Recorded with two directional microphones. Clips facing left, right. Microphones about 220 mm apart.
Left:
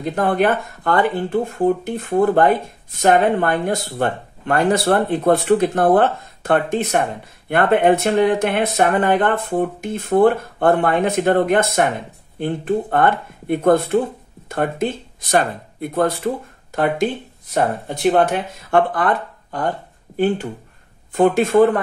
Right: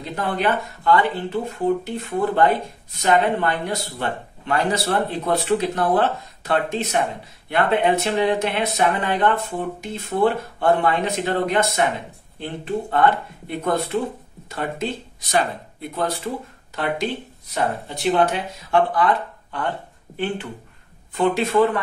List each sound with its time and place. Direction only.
0.0 s speech: 50° left (ahead or behind)